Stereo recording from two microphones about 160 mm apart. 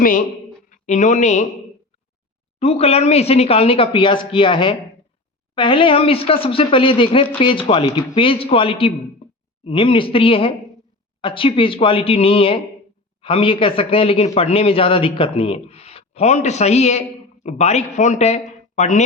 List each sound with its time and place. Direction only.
0.0 s a woman's voice: 60° left (ahead or behind)
2.6 s a man's voice: 40° left (ahead or behind)